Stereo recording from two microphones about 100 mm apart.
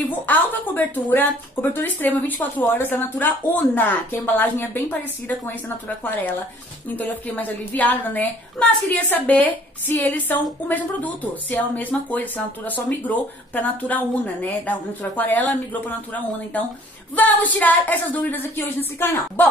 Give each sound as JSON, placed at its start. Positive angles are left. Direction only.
{"t": 0.0, "sound": "speech", "side_deg": 20}